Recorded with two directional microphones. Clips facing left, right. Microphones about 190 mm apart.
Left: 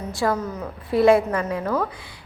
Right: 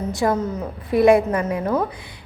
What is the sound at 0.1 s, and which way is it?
A woman's voice, 20° right (ahead or behind).